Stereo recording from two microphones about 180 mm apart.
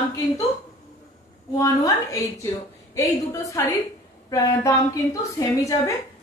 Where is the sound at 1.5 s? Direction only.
20° left (ahead or behind).